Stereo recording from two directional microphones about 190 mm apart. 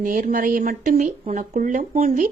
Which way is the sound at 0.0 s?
45° right (ahead or behind).